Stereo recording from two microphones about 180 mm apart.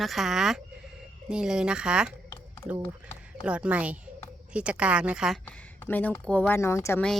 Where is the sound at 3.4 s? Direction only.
5° right (ahead or behind).